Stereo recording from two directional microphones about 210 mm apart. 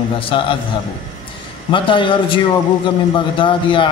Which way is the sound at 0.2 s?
25° left (ahead or behind).